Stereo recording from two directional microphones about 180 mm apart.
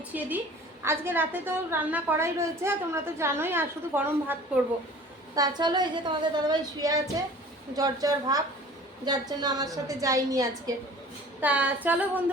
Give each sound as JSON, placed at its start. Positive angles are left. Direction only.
{"t": 0.1, "sound": "a woman's voice", "side_deg": -10}
{"t": 5.3, "sound": "a woman's voice", "side_deg": -20}
{"t": 11.3, "sound": "a woman's voice", "side_deg": -10}